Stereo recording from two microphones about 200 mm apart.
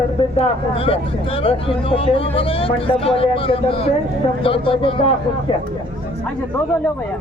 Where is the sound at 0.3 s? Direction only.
30° left (ahead or behind).